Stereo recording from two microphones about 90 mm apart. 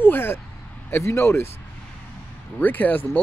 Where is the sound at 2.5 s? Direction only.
20° left (ahead or behind).